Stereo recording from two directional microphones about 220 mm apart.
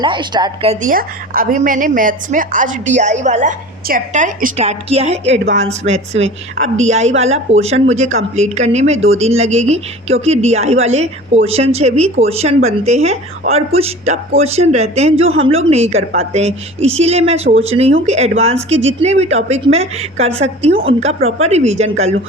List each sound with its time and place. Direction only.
0.0 s a woman's voice: 20° right (ahead or behind)